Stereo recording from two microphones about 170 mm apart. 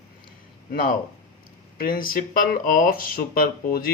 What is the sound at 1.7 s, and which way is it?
Speech, 55° left (ahead or behind).